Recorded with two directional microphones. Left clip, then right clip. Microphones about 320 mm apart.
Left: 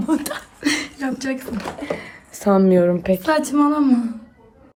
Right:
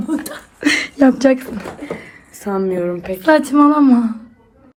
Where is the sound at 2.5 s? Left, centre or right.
Left.